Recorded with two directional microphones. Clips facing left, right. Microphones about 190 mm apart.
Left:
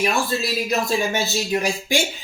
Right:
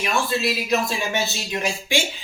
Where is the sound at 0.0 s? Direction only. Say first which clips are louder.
Left 1 dB; 40° left (ahead or behind).